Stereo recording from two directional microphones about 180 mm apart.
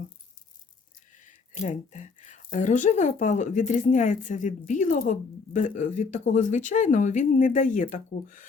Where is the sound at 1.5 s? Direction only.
40° left (ahead or behind).